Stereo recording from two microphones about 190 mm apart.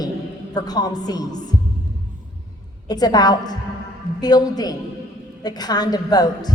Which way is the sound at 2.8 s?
20° left (ahead or behind).